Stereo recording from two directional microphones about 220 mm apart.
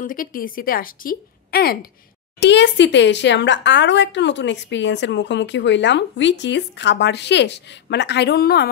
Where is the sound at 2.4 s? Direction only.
55° left (ahead or behind).